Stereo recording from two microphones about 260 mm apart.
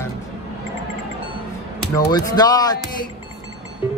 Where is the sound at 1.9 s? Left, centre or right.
Centre.